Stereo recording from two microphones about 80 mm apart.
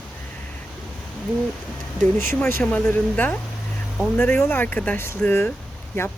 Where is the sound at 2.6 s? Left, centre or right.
Centre.